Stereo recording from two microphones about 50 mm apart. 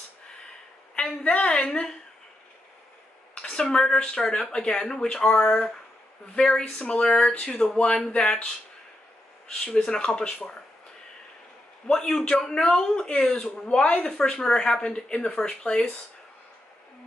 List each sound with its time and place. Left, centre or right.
0.9 s a woman's voice: left
3.4 s a man's voice: centre
9.8 s a man's voice: centre
11.9 s a man's voice: centre
13.3 s a man's voice: centre